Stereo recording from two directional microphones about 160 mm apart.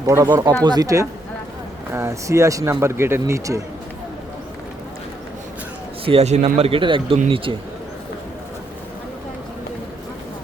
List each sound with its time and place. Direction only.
0.0 s speech: 20° right (ahead or behind)
6.1 s speech: 40° right (ahead or behind)